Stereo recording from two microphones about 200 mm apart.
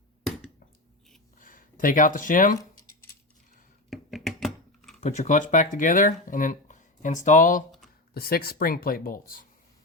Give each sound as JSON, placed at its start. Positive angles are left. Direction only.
{"t": 1.4, "sound": "speech", "side_deg": 45}
{"t": 3.8, "sound": "computer keyboard", "side_deg": 0}
{"t": 4.9, "sound": "speech", "side_deg": 35}